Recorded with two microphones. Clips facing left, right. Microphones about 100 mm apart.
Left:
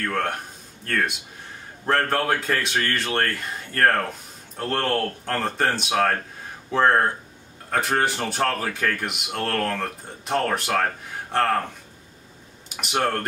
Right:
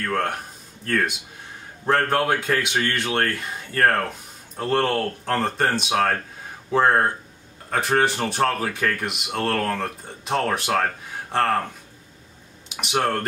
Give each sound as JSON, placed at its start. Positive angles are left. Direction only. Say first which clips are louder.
{"t": 0.0, "sound": "speech", "louder": "right 1 dB", "side_deg": 0}
{"t": 12.8, "sound": "speech", "louder": "right 1 dB", "side_deg": 0}